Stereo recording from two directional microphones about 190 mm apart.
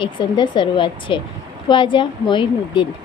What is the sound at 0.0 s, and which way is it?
Speech, 25° left (ahead or behind).